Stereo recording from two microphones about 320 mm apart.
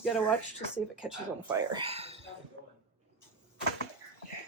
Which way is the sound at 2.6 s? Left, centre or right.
Right.